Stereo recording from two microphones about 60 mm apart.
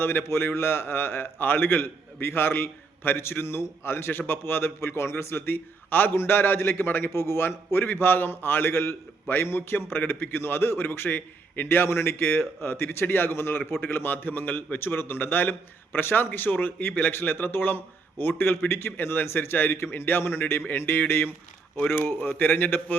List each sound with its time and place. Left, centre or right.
0.0 s a man's voice: left